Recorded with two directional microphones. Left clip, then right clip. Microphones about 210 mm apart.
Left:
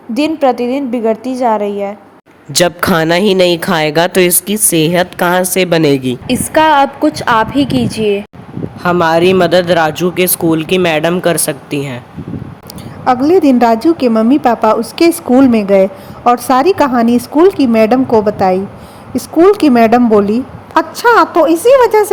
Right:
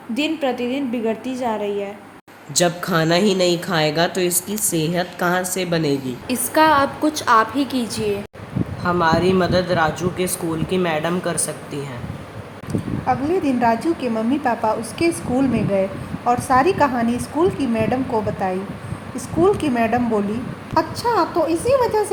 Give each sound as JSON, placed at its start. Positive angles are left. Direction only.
{"t": 0.1, "sound": "speech", "side_deg": 35}
{"t": 2.5, "sound": "speech", "side_deg": 50}
{"t": 6.3, "sound": "speech", "side_deg": 20}
{"t": 7.5, "sound": "a woman's voice", "side_deg": -15}
{"t": 8.8, "sound": "speech", "side_deg": 40}
{"t": 13.1, "sound": "a woman's voice", "side_deg": 55}
{"t": 20.7, "sound": "speech", "side_deg": 45}